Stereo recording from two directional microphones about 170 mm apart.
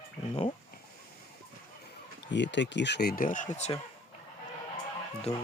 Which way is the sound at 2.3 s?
90° left.